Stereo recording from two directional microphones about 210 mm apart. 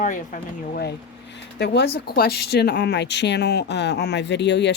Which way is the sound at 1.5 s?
55° left (ahead or behind).